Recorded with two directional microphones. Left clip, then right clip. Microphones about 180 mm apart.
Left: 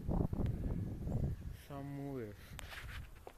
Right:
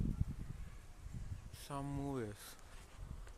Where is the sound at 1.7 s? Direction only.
15° right (ahead or behind).